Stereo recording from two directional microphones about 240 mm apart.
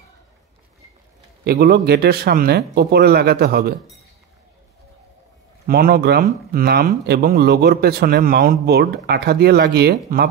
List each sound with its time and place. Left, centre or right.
1.4 s speech: right
5.7 s speech: right